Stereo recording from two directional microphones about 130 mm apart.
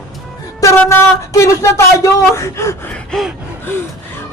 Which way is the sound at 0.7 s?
20° left (ahead or behind).